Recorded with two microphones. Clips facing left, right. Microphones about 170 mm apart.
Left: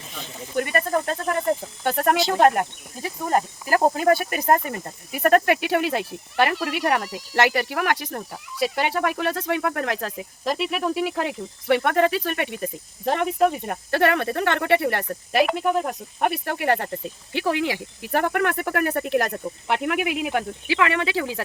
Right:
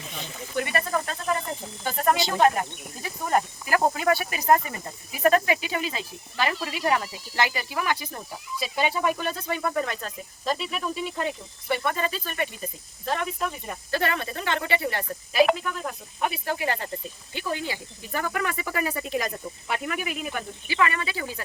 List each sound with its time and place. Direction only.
0.5 s speech: 45° left (ahead or behind); by 2.1 s 65° left (ahead or behind)
3.0 s speech: 35° left (ahead or behind)
3.9 s speech: 45° left (ahead or behind); by 16.9 s 60° left (ahead or behind)
17.3 s speech: 85° left